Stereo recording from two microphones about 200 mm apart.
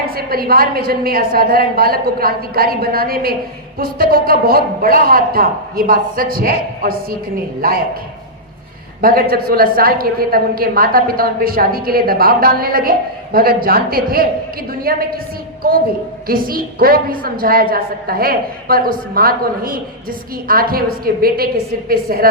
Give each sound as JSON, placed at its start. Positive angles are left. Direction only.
{"t": 0.1, "sound": "a woman's voice", "side_deg": -50}
{"t": 9.0, "sound": "a man's voice", "side_deg": -45}